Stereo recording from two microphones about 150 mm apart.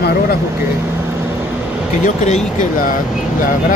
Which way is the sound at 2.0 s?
55° left (ahead or behind).